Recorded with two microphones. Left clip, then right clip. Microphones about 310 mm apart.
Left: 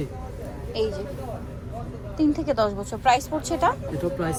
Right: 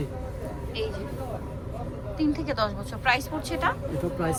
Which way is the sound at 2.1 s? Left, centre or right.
Centre.